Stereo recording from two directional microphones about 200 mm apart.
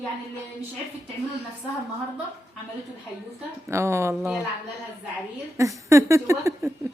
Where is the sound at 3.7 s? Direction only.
15° right (ahead or behind).